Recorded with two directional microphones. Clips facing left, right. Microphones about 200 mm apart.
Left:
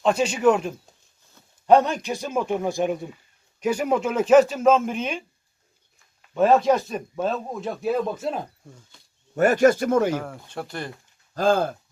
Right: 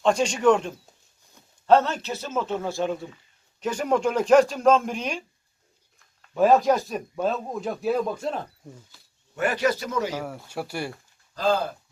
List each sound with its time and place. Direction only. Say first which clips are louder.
0.0 s a man's voice: left 1 dB; 5° left (ahead or behind)
9.3 s speech: left 7 dB; 45° left (ahead or behind)
10.2 s speech: even; 5° right (ahead or behind)
11.3 s speech: left 3 dB; 50° left (ahead or behind)